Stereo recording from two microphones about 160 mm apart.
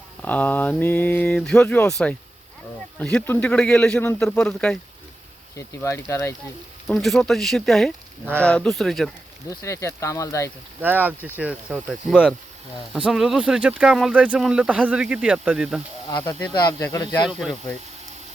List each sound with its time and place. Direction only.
0.2 s speech: 10° left (ahead or behind)
5.5 s speech: 15° left (ahead or behind)
6.8 s speech: centre (ahead or behind)
9.5 s speech: 20° left (ahead or behind)
10.8 s speech: 10° right (ahead or behind)
16.5 s speech: 25° left (ahead or behind)